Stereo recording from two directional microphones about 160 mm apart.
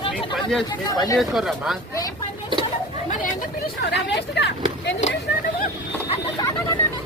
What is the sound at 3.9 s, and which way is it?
Speech, 90° left.